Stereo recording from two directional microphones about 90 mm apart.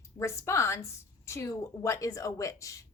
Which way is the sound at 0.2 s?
30° left (ahead or behind).